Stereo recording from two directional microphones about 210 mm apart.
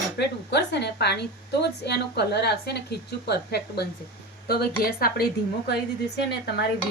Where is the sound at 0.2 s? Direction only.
55° left (ahead or behind).